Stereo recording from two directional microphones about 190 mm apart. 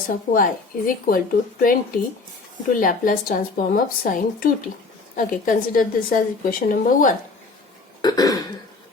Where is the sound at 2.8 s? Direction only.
45° left (ahead or behind).